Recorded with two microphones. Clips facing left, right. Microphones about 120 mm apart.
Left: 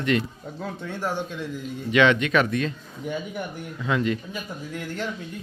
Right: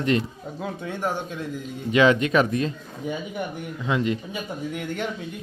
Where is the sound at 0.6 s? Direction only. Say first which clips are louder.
Right 2 dB; 10° right (ahead or behind).